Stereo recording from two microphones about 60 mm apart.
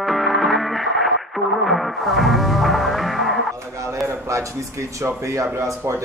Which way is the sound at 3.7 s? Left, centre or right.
Right.